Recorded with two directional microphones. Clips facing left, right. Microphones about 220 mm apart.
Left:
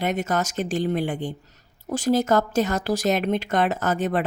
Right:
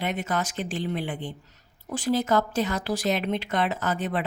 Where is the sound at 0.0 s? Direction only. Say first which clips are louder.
Left 4 dB; 45° left (ahead or behind).